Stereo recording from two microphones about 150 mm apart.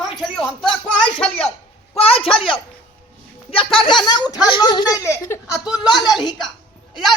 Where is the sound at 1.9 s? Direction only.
40° left (ahead or behind); by 5.0 s 25° left (ahead or behind).